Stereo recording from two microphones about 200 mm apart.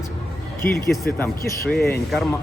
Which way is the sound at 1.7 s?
50° left (ahead or behind).